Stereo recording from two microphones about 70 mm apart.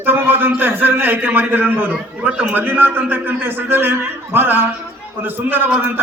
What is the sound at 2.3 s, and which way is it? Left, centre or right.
Speech, centre.